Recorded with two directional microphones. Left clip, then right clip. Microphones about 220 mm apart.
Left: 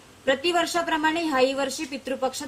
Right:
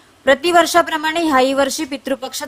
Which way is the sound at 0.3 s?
50° right (ahead or behind).